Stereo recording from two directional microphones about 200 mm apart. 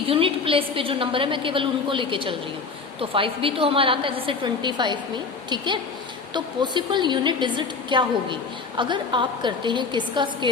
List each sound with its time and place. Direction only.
0.1 s a woman's voice: 25° right (ahead or behind)